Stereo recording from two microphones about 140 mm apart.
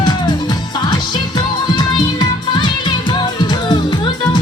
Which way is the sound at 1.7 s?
30° left (ahead or behind).